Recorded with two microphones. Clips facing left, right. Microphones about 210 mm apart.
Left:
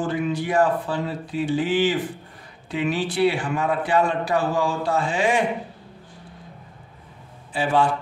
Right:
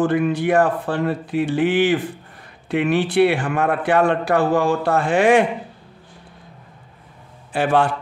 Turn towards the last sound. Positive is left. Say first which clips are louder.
# right 3 dB
turn(degrees=-65)  # may be behind; listen again after turning